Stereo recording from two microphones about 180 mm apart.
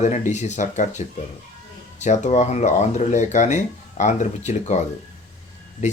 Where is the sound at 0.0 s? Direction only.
40° left (ahead or behind).